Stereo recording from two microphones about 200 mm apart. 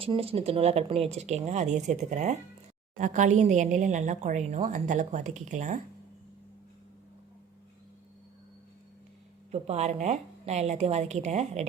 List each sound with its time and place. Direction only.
0.0 s speech: 30° right (ahead or behind)
9.5 s speech: 35° right (ahead or behind)